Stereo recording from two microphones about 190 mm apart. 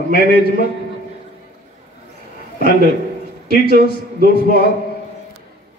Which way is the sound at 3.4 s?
50° right (ahead or behind).